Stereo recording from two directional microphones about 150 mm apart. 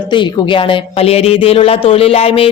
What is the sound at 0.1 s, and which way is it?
A woman's voice, 35° left (ahead or behind).